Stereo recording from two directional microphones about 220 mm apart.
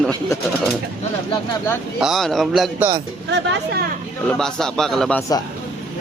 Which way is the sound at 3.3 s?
50° right (ahead or behind).